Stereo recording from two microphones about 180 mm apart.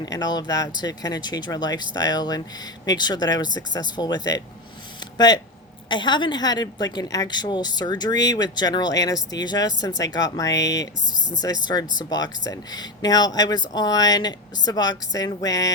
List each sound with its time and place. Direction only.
0.0 s a woman's voice: 20° left (ahead or behind)